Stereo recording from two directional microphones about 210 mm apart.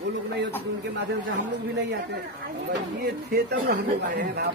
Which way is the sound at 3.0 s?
45° right (ahead or behind).